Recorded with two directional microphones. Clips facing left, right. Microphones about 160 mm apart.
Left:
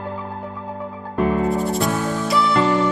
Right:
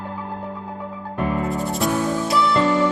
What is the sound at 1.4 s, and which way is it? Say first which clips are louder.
Music: left 3 dB; centre (ahead or behind).